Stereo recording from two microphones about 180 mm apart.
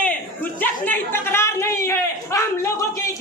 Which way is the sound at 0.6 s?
10° left (ahead or behind).